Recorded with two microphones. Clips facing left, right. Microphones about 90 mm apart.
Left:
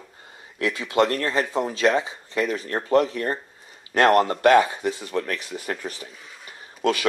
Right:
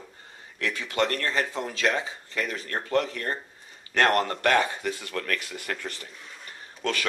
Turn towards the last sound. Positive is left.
turn(degrees=10)  # may be behind; listen again after turning